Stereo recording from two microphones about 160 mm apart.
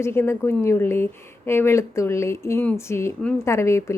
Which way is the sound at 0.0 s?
15° left (ahead or behind).